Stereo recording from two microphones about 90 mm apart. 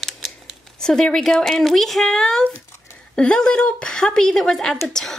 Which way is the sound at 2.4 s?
20° left (ahead or behind).